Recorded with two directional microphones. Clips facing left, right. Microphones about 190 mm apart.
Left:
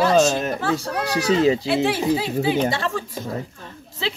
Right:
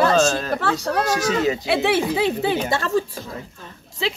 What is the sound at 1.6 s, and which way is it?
Speech, 65° right (ahead or behind).